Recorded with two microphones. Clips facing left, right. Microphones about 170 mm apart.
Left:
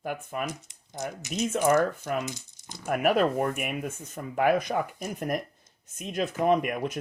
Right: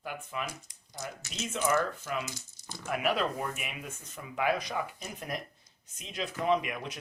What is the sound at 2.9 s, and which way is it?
Speech, 50° left (ahead or behind).